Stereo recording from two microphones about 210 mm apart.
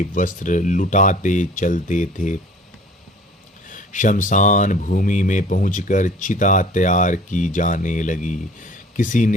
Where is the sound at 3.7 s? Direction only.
40° left (ahead or behind).